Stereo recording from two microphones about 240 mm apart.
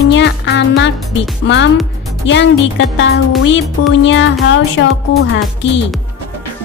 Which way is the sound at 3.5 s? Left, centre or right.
Left.